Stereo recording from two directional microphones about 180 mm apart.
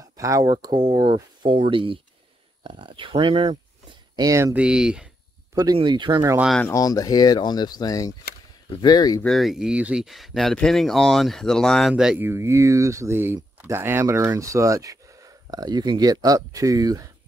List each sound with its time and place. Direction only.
0.0 s speech: 20° right (ahead or behind)
4.6 s speech: 5° right (ahead or behind)
5.5 s speech: 20° right (ahead or behind)
6.3 s speech: 5° right (ahead or behind)
6.6 s speech: 20° left (ahead or behind)
9.2 s speech: centre (ahead or behind); by 17.1 s 20° right (ahead or behind)